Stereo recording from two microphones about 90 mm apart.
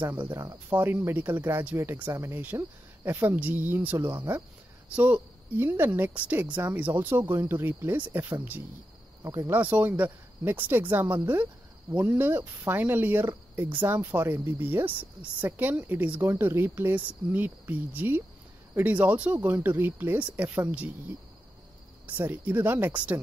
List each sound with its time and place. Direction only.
0.0 s speech: 25° right (ahead or behind)
9.2 s speech: 35° right (ahead or behind)
9.5 s speech: 15° right (ahead or behind)
16.2 s speech: 25° right (ahead or behind)
22.0 s speech: 20° right (ahead or behind)